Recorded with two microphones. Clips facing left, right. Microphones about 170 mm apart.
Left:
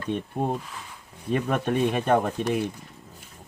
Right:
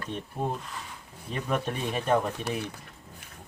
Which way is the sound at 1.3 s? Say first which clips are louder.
Left 6 dB; 55° left (ahead or behind).